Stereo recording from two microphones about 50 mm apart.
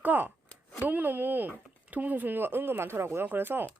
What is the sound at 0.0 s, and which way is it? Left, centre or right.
Speech, right.